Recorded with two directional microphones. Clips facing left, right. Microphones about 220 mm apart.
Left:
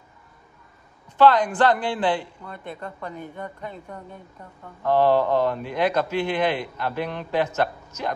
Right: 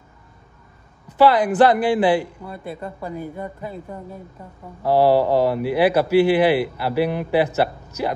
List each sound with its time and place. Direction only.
1.0 s speech: 10° right (ahead or behind)